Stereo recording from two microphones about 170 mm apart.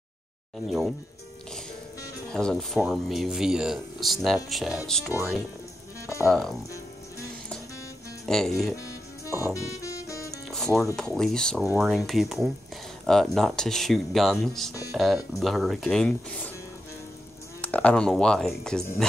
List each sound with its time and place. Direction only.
0.7 s speech: centre (ahead or behind)
2.3 s speech: 5° left (ahead or behind)
6.2 s speech: centre (ahead or behind)
8.3 s speech: centre (ahead or behind)
8.8 s music: 20° left (ahead or behind)
10.5 s music: centre (ahead or behind)
11.0 s speech: 5° left (ahead or behind)
17.6 s speech: 10° left (ahead or behind)